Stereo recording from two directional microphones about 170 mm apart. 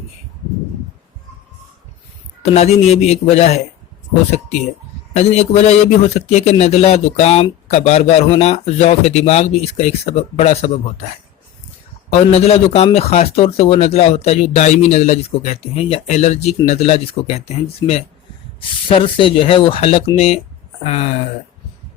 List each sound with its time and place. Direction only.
2.4 s a man's voice: 40° left (ahead or behind)
5.1 s a man's voice: 40° left (ahead or behind)
12.1 s a man's voice: 35° left (ahead or behind)